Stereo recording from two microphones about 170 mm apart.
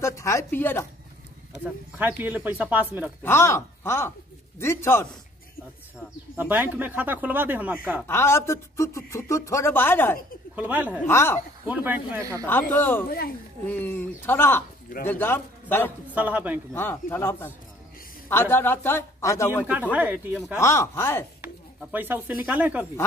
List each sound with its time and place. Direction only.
0.0 s speech: 15° left (ahead or behind)
1.6 s speech: 10° right (ahead or behind)
3.3 s speech: 15° left (ahead or behind)
6.3 s speech: 10° right (ahead or behind)
8.1 s speech: 15° left (ahead or behind)
10.5 s speech: 10° right (ahead or behind)
11.1 s speech: 15° left (ahead or behind)
11.6 s speech: 10° right (ahead or behind)
12.4 s speech: 10° left (ahead or behind)
16.1 s speech: 10° right (ahead or behind)
16.7 s speech: 15° left (ahead or behind)
19.7 s speech: 10° right (ahead or behind)
20.5 s speech: 15° left (ahead or behind)
21.9 s speech: 10° right (ahead or behind)